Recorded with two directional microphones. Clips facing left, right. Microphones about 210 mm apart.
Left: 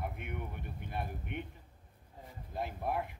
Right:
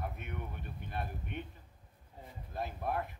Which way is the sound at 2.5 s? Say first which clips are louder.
Left 1 dB; 15° left (ahead or behind).